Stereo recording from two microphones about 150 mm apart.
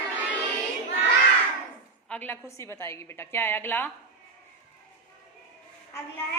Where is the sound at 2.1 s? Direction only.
10° left (ahead or behind).